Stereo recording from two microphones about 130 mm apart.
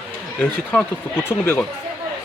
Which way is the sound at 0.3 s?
10° left (ahead or behind).